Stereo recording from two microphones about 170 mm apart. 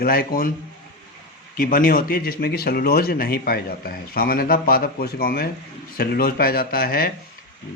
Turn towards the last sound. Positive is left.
turn(degrees=60)  # may be behind; listen again after turning